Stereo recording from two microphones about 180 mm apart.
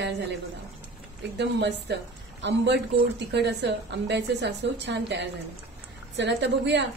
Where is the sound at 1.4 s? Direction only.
75° right (ahead or behind).